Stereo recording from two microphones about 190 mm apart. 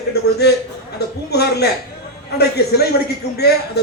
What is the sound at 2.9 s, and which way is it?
Speech, 60° left (ahead or behind).